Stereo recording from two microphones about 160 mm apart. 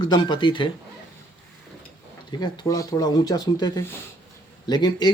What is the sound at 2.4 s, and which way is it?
Speech, 25° left (ahead or behind).